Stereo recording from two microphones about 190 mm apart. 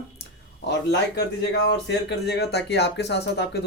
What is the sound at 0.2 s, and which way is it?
Speech, 65° left (ahead or behind).